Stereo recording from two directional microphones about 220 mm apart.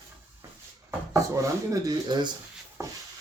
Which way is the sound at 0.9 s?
15° right (ahead or behind).